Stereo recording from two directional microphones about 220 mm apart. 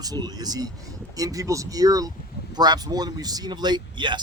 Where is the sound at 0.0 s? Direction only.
15° right (ahead or behind).